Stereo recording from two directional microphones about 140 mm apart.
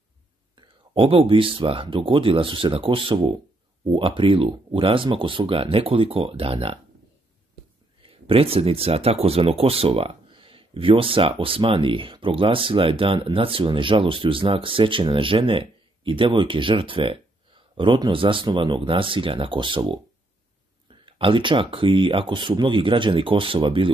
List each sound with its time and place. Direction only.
0.6 s speech: 40° right (ahead or behind)
8.0 s speech: 40° right (ahead or behind)